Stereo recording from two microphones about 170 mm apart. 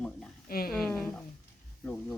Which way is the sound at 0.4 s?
60° left (ahead or behind).